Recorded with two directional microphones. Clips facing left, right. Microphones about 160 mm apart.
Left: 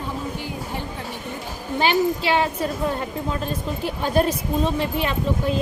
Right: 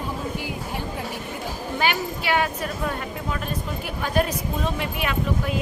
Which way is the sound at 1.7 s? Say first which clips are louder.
Left 6 dB; 25° left (ahead or behind).